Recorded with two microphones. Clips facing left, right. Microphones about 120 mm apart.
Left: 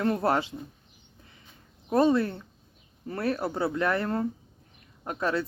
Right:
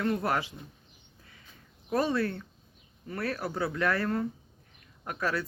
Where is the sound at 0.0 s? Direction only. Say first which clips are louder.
Left 4 dB; 30° left (ahead or behind).